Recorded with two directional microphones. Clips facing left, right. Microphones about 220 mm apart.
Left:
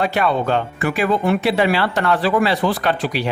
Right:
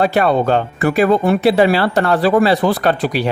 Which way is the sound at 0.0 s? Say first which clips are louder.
Right 5 dB; 40° right (ahead or behind).